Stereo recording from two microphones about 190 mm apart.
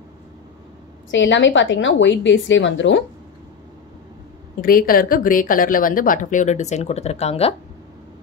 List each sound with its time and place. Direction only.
1.1 s a woman's voice: 75° left (ahead or behind)
4.6 s a woman's voice: 50° left (ahead or behind); by 7.5 s 35° left (ahead or behind)